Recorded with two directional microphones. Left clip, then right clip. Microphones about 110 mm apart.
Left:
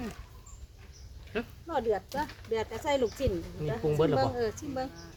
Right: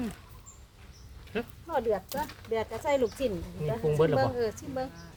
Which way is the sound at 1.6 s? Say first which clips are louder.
Right 1 dB; 5° left (ahead or behind).